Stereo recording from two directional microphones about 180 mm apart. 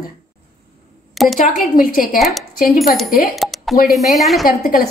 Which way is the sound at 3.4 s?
Centre (ahead or behind).